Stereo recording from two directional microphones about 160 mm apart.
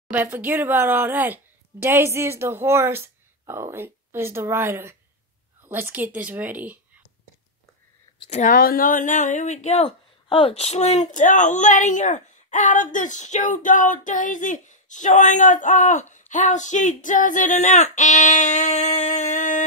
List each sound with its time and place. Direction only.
0.1 s speech: 10° right (ahead or behind)
8.2 s speech: 45° left (ahead or behind)
9.8 s speech: 30° left (ahead or behind); by 19.6 s 50° left (ahead or behind)